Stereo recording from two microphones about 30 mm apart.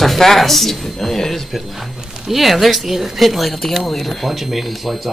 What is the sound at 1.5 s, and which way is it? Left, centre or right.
Speech, centre.